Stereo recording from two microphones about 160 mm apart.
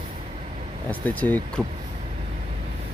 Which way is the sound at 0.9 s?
10° left (ahead or behind).